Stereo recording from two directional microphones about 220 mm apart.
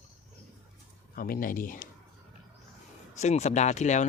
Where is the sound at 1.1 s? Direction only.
40° left (ahead or behind).